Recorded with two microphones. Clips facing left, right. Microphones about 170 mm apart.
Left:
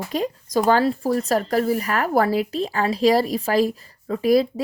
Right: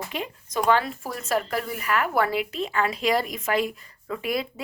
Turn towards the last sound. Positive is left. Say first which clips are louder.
# left 10 dB
turn(degrees=35)  # may be behind; listen again after turning